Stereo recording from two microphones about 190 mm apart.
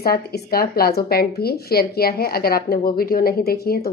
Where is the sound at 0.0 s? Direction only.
55° left (ahead or behind).